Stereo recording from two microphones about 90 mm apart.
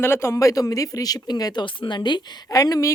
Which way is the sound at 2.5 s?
40° left (ahead or behind).